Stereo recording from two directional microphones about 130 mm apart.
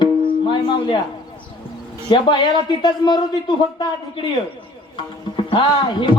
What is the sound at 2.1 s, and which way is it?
Music, 35° left (ahead or behind).